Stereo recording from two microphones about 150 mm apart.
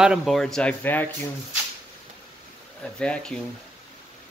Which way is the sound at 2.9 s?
5° left (ahead or behind).